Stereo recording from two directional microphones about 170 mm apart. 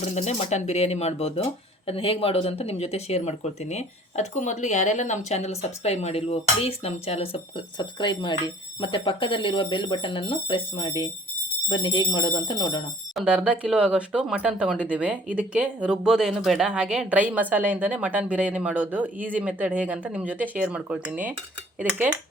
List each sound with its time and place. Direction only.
0.0 s speech: 40° left (ahead or behind)
13.1 s speech: 5° right (ahead or behind)